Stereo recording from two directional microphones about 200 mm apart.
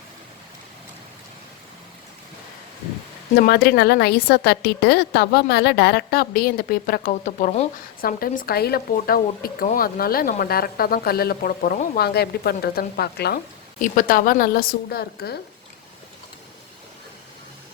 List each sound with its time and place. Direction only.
3.3 s speech: 50° left (ahead or behind); by 7.7 s 35° left (ahead or behind)
8.0 s speech: 45° left (ahead or behind)